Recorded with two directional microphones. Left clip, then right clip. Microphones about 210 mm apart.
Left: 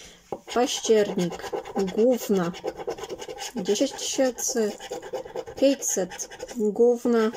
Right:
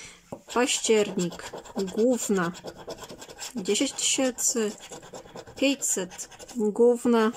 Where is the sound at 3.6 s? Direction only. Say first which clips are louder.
Left 2 dB; 10° right (ahead or behind).